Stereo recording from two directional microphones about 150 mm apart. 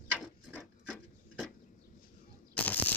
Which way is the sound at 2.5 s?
10° left (ahead or behind).